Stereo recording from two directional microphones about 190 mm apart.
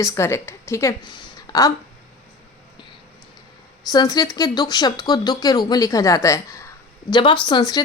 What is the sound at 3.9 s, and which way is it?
A woman's voice, 20° left (ahead or behind).